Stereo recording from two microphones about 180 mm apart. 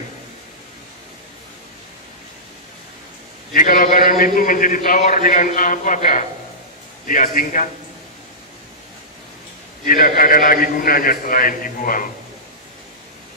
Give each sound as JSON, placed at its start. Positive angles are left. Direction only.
{"t": 3.5, "sound": "a man's voice", "side_deg": 50}
{"t": 9.8, "sound": "a man's voice", "side_deg": 50}